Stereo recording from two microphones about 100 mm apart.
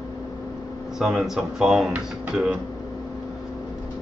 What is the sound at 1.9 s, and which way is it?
Speech, 15° right (ahead or behind).